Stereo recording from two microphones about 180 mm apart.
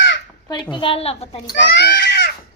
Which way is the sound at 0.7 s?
30° left (ahead or behind).